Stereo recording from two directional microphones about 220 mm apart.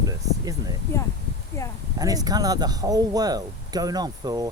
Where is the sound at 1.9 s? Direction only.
15° right (ahead or behind).